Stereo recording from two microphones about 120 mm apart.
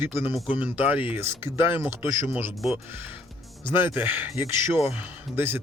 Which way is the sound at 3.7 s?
15° right (ahead or behind).